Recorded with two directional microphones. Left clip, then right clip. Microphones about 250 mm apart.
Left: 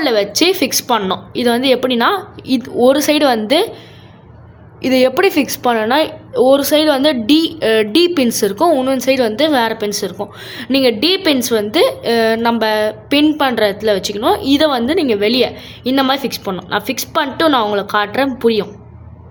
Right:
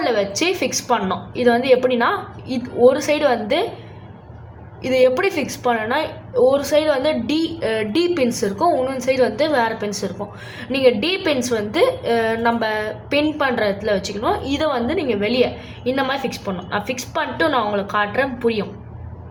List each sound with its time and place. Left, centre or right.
0.0 s a woman's voice: left
4.8 s a woman's voice: left